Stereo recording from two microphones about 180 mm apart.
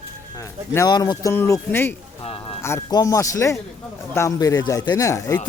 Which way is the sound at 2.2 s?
30° left (ahead or behind).